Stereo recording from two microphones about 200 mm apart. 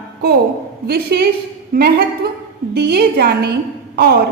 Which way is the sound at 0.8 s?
50° right (ahead or behind).